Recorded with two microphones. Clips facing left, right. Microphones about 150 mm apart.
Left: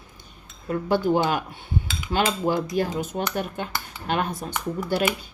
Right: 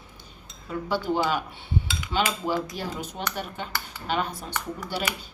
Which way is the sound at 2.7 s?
50° left (ahead or behind).